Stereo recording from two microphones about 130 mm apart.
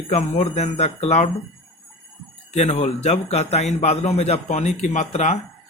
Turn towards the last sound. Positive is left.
turn(degrees=65)  # may be behind; listen again after turning